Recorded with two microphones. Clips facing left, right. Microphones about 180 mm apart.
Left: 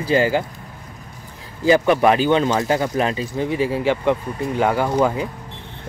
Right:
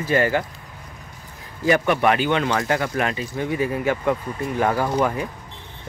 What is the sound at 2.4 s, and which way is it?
Speech, 20° left (ahead or behind).